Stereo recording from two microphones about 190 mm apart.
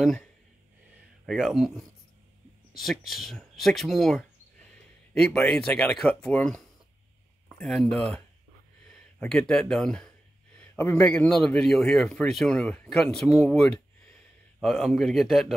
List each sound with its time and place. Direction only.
0.0 s a man's voice: centre (ahead or behind)
9.2 s a man's voice: 5° left (ahead or behind)